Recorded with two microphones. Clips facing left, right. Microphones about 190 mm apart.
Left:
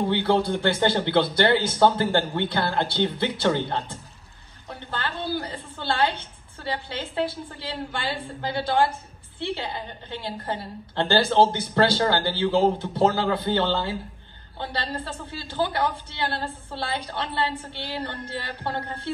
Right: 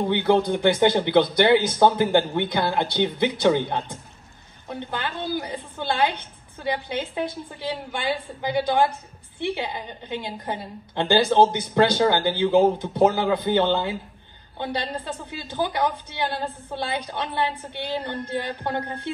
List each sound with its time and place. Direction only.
0.1 s a woman's voice: 15° right (ahead or behind)